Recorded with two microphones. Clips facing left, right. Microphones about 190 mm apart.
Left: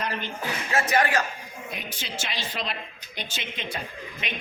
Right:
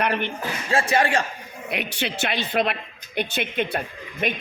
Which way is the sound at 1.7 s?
70° right (ahead or behind).